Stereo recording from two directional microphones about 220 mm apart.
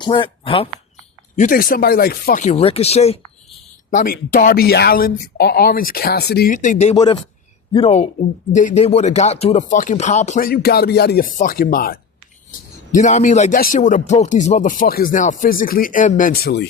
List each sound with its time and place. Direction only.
0.0 s speech: 20° left (ahead or behind)
1.4 s speech: 40° left (ahead or behind)
3.9 s speech: 40° left (ahead or behind)